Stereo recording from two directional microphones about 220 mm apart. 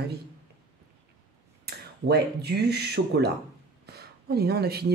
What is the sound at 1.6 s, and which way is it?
Speech, 50° right (ahead or behind).